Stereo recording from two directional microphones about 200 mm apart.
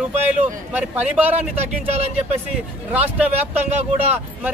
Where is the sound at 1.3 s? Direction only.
30° right (ahead or behind).